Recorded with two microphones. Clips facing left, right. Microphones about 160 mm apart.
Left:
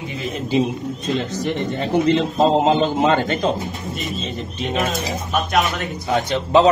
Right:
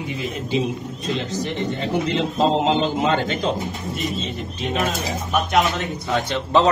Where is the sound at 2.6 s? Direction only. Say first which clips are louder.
Left 3 dB; 50° left (ahead or behind).